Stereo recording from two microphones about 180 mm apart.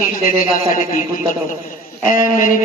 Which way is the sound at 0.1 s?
50° left (ahead or behind).